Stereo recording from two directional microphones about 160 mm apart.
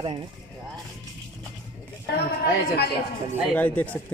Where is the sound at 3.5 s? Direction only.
10° left (ahead or behind).